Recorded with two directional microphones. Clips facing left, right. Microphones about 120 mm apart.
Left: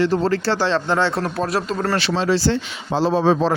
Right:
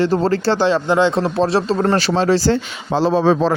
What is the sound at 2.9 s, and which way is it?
Speech, 90° right.